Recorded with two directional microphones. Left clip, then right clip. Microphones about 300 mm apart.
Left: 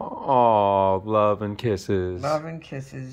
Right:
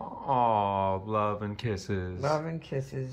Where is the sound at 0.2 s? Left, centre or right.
Left.